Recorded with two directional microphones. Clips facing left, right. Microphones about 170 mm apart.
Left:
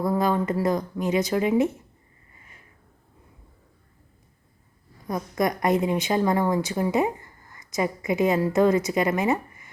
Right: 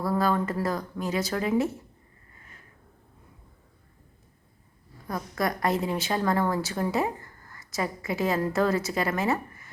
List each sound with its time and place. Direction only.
0.0 s a woman's voice: 20° left (ahead or behind)
5.0 s a woman's voice: 20° left (ahead or behind)